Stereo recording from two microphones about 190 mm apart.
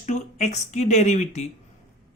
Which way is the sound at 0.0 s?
40° left (ahead or behind).